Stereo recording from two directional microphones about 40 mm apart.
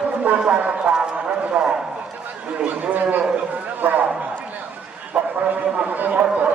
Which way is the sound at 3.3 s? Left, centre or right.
Right.